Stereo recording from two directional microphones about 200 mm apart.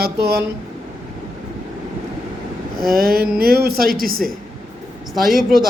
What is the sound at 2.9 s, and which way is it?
A man's voice, 45° right (ahead or behind).